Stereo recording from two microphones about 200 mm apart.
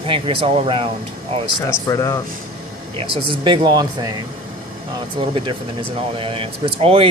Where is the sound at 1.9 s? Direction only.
15° left (ahead or behind).